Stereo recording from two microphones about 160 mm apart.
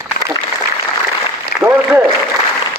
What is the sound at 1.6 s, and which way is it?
Applause, 10° right (ahead or behind).